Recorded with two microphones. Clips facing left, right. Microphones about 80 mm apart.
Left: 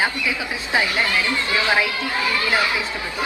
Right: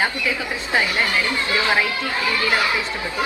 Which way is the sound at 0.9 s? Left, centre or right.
Right.